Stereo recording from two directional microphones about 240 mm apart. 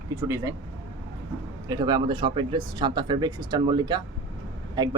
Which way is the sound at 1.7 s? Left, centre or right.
Centre.